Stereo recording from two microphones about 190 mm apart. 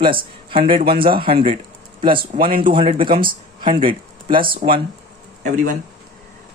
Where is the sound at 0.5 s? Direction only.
25° right (ahead or behind).